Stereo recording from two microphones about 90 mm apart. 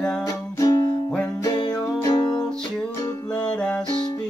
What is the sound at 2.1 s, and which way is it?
Music, 50° left (ahead or behind).